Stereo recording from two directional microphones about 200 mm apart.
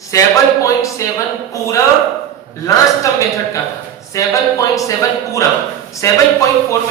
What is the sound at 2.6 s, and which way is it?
Speech, 15° left (ahead or behind).